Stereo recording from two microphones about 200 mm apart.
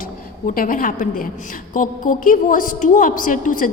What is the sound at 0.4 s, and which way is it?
A woman's voice, 45° left (ahead or behind).